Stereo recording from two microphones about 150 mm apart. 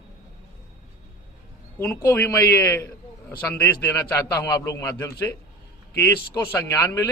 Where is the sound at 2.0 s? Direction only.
15° left (ahead or behind).